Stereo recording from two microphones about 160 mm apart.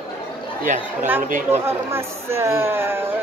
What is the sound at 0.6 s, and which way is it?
Speech, 50° right (ahead or behind).